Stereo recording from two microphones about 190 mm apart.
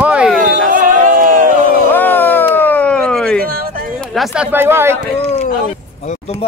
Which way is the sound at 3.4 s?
50° right (ahead or behind).